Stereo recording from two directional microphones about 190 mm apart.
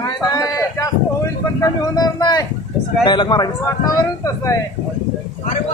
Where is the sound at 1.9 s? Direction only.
20° left (ahead or behind).